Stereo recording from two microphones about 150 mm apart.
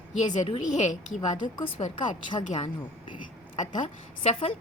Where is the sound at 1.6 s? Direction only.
40° left (ahead or behind).